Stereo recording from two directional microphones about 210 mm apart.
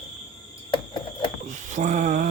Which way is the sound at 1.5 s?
35° right (ahead or behind).